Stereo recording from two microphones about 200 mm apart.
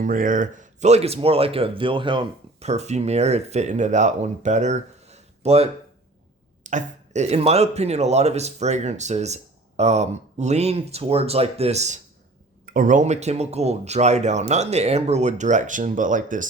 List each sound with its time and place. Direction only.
0.0 s speech: 40° right (ahead or behind)